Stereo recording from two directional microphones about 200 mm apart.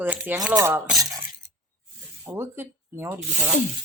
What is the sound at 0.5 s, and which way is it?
Dishes, 10° right (ahead or behind).